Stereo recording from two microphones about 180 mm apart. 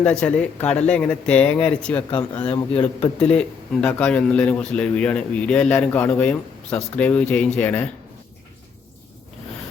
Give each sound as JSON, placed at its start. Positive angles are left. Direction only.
{"t": 0.0, "sound": "a man's voice", "side_deg": 5}
{"t": 2.0, "sound": "a man's voice", "side_deg": 30}
{"t": 3.2, "sound": "a man's voice", "side_deg": 5}